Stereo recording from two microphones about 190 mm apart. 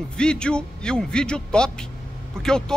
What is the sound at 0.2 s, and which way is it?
A man's voice, 5° left (ahead or behind).